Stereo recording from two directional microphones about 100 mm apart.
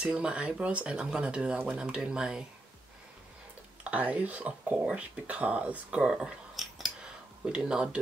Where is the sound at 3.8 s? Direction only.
15° right (ahead or behind).